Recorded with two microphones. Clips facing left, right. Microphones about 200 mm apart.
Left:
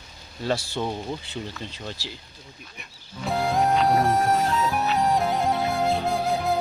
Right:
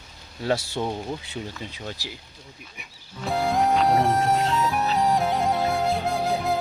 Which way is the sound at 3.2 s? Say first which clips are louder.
Even; centre (ahead or behind).